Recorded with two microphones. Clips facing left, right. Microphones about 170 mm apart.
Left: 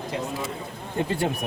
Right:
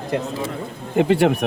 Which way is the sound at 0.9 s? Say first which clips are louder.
Right 10 dB; 80° right.